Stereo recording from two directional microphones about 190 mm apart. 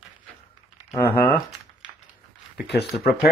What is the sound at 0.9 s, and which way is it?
Speech, 10° left (ahead or behind).